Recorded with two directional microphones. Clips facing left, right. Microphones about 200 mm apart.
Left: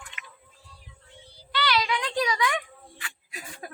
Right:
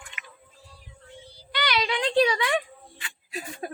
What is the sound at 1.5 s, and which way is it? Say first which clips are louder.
Child singing: left 1 dB; 20° right (ahead or behind).